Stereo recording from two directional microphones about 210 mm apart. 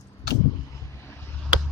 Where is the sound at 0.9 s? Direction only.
10° left (ahead or behind).